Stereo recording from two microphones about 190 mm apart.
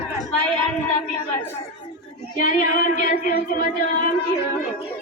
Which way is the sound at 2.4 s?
45° left (ahead or behind).